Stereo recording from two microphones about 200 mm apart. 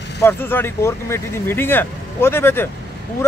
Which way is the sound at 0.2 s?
10° left (ahead or behind).